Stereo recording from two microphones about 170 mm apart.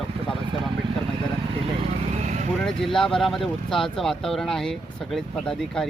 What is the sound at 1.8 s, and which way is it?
Vehicle, 45° right (ahead or behind).